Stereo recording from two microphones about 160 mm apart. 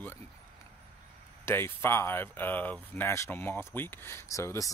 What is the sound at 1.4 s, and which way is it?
Speech, 15° left (ahead or behind).